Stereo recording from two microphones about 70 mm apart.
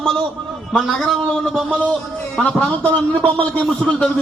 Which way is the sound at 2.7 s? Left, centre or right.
Left.